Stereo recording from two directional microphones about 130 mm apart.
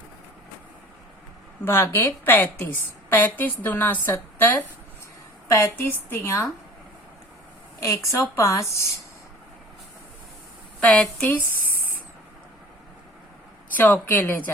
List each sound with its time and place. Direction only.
1.6 s a woman's voice: 20° left (ahead or behind)
7.8 s a woman's voice: 25° left (ahead or behind)
10.8 s a woman's voice: 10° left (ahead or behind)
11.7 s spray: 90° left
13.7 s a woman's voice: 15° left (ahead or behind)